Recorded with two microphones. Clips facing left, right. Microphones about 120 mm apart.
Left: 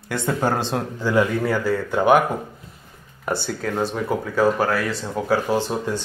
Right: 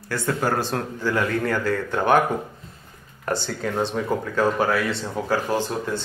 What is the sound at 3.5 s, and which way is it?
Speech, centre (ahead or behind).